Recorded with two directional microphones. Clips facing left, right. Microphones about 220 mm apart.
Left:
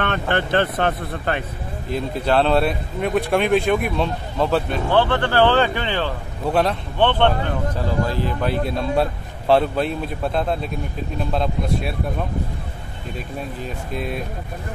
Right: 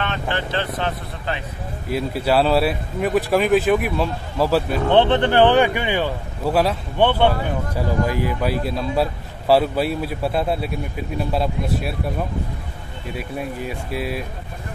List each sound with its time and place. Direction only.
0.0 s speech: 55° left (ahead or behind)
1.9 s speech: 5° right (ahead or behind)
4.9 s speech: 20° right (ahead or behind)